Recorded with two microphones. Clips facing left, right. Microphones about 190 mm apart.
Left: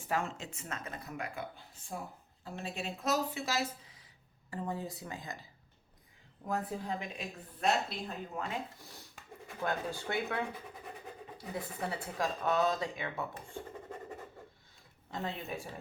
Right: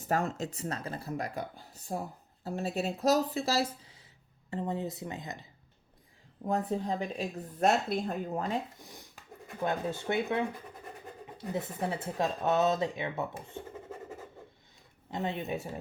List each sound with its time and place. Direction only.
0.0 s speech: 40° right (ahead or behind); by 5.5 s 20° right (ahead or behind)
6.4 s speech: 30° right (ahead or behind)
7.9 s speech: 50° right (ahead or behind)
8.8 s speech: 15° right (ahead or behind)
9.1 s a sound: centre (ahead or behind)
10.1 s speech: 20° right (ahead or behind)
10.5 s a sound: centre (ahead or behind)
11.4 s speech: centre (ahead or behind)
11.8 s speech: 25° right (ahead or behind)
15.1 s speech: 20° right (ahead or behind)